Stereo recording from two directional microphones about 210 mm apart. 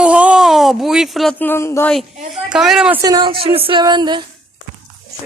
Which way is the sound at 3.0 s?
20° right (ahead or behind).